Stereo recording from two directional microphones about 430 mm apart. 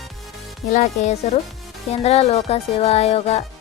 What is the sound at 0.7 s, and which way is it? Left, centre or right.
Speech, centre.